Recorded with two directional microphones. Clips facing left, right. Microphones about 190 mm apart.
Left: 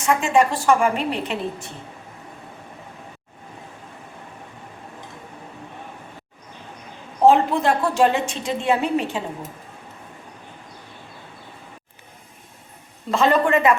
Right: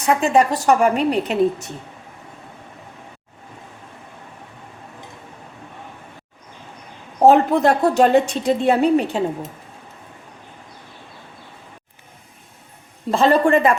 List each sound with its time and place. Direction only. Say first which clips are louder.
0.0 s a woman's voice: right 2 dB; 35° right (ahead or behind)
7.2 s a woman's voice: right 3 dB; 40° right (ahead or behind)
13.1 s a woman's voice: right 3 dB; 35° right (ahead or behind)